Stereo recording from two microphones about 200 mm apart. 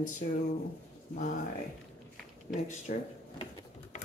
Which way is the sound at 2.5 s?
35° left (ahead or behind).